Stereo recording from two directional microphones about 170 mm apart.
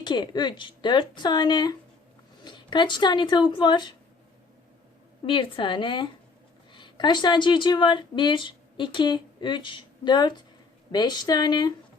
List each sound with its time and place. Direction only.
0.0 s speech: 25° left (ahead or behind)
5.2 s a woman's voice: 30° left (ahead or behind)